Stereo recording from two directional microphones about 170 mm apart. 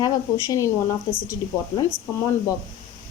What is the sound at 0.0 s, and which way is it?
Speech, 20° left (ahead or behind).